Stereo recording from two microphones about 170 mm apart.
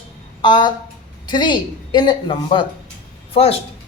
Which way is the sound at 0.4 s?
25° left (ahead or behind).